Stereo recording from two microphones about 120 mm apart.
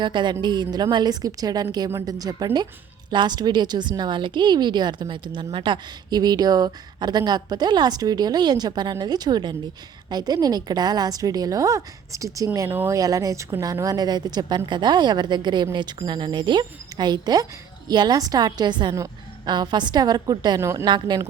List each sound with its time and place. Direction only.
0.0 s a woman's voice: 40° right (ahead or behind)
20.6 s speech: 20° right (ahead or behind)
20.8 s a woman's voice: 40° right (ahead or behind)